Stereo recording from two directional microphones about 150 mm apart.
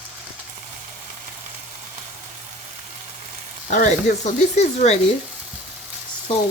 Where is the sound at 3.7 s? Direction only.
55° left (ahead or behind).